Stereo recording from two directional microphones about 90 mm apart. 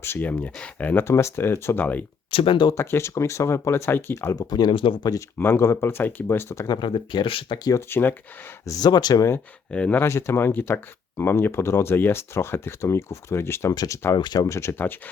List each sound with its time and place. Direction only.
0.0 s speech: 25° left (ahead or behind)
1.0 s speech: 30° left (ahead or behind)
2.3 s speech: 70° left (ahead or behind)
2.7 s speech: 30° left (ahead or behind)
4.4 s speech: 50° left (ahead or behind)
4.7 s speech: 70° left (ahead or behind)
5.4 s speech: 25° left (ahead or behind)
6.7 s speech: 60° left (ahead or behind); by 7.6 s 80° left
7.8 s speech: 25° left (ahead or behind)
8.6 s speech: 45° left (ahead or behind)
9.7 s speech: 15° left (ahead or behind)
10.0 s speech: 30° left (ahead or behind)
14.2 s speech: 55° left (ahead or behind)
14.4 s speech: 30° left (ahead or behind)